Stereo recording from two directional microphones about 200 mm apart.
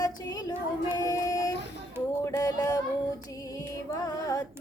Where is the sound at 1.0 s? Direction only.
20° left (ahead or behind).